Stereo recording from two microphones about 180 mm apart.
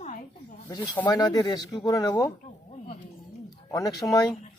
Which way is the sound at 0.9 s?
15° left (ahead or behind).